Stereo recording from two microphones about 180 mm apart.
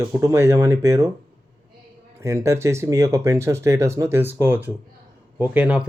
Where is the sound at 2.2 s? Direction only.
15° right (ahead or behind).